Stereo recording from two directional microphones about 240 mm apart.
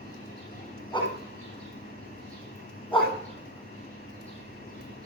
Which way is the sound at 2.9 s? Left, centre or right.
Left.